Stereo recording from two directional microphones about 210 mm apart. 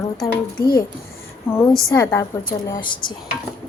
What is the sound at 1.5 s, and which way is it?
A woman's voice, 10° left (ahead or behind).